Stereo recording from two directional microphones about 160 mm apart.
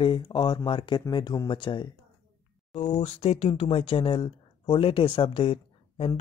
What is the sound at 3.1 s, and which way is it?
Speech, 40° left (ahead or behind).